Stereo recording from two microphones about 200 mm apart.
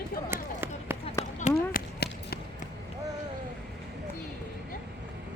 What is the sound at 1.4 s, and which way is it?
Run, 40° left (ahead or behind).